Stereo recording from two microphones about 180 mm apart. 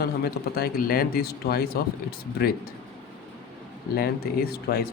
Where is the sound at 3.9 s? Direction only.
55° left (ahead or behind).